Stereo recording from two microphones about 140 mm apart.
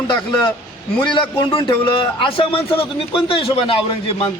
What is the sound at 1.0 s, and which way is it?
Speech, 35° left (ahead or behind).